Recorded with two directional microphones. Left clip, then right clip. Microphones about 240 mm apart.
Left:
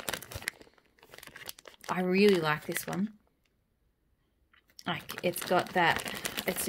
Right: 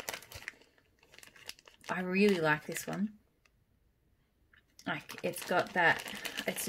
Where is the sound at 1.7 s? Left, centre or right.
Left.